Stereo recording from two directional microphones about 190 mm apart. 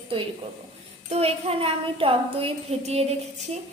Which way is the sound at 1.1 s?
30° right (ahead or behind).